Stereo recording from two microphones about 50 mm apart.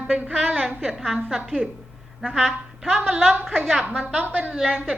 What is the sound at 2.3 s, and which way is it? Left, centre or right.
Speech, centre.